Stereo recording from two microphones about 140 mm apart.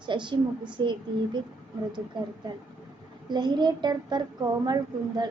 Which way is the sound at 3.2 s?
30° right (ahead or behind).